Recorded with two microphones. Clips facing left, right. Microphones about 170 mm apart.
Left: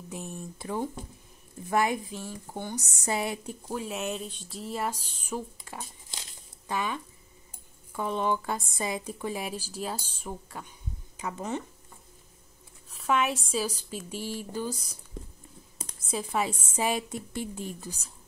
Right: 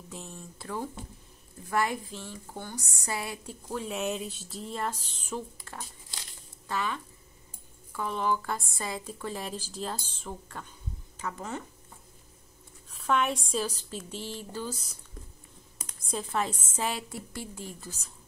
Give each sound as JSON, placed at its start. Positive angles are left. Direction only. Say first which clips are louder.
{"t": 0.1, "sound": "a woman's voice", "louder": "left 5 dB", "side_deg": 15}
{"t": 3.7, "sound": "speech", "louder": "right 1 dB", "side_deg": 0}
{"t": 13.0, "sound": "speech", "louder": "left 1 dB", "side_deg": 5}
{"t": 16.1, "sound": "speech", "louder": "left 1 dB", "side_deg": 10}